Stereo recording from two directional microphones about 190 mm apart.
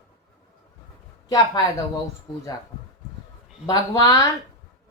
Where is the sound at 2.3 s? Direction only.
20° left (ahead or behind).